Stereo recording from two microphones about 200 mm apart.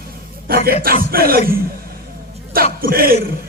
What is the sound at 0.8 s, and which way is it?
Music, 50° right (ahead or behind).